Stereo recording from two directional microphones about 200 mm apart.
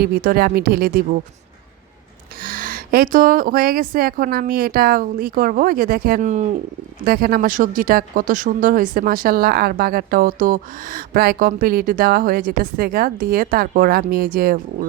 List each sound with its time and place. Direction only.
0.0 s speech: 45° right (ahead or behind)
2.4 s speech: 45° right (ahead or behind)
7.0 s speech: 50° right (ahead or behind)